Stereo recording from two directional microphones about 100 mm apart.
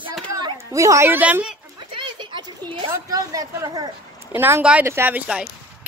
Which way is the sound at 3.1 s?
35° right (ahead or behind).